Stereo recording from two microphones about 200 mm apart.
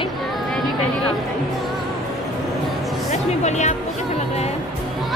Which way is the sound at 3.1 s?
35° left (ahead or behind).